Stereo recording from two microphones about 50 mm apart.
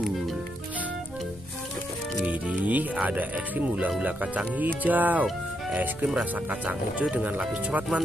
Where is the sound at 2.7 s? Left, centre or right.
Right.